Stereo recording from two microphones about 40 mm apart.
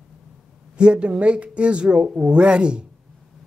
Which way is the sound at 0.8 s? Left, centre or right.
Right.